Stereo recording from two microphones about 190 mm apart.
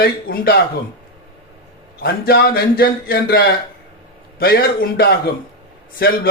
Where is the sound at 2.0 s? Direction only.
55° left (ahead or behind).